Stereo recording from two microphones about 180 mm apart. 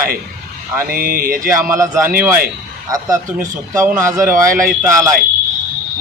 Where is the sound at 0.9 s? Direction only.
55° right (ahead or behind).